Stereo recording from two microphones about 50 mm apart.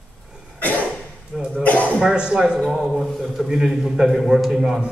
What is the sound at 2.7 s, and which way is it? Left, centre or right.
A man's voice, centre.